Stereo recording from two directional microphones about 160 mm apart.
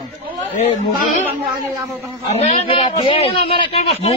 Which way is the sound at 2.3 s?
35° left (ahead or behind).